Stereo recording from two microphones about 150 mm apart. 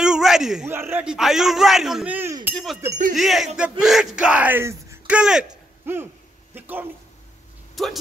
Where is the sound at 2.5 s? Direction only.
Centre (ahead or behind).